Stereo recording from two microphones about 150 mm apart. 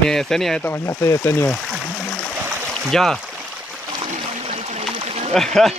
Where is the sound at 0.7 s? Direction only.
20° left (ahead or behind).